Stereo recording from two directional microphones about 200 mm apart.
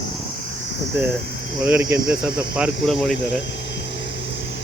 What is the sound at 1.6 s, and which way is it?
Speech, 15° right (ahead or behind).